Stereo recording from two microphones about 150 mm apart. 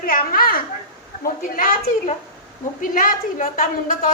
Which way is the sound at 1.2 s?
65° left (ahead or behind).